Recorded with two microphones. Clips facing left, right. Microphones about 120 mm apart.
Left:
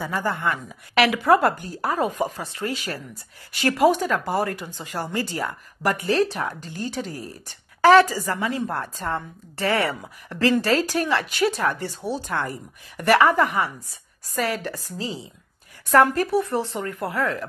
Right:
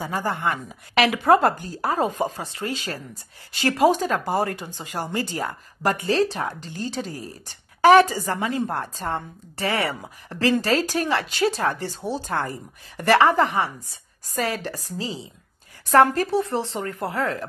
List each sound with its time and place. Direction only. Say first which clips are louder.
0.0 s a woman's voice: even; 20° right (ahead or behind)
7.8 s a woman's voice: even; 20° right (ahead or behind)